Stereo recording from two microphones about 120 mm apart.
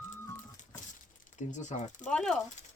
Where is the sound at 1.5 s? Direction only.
80° left.